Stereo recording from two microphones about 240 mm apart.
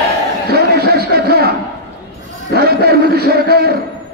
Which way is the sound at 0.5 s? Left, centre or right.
Right.